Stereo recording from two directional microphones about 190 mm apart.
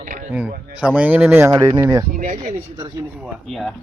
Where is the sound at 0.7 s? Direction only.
5° right (ahead or behind).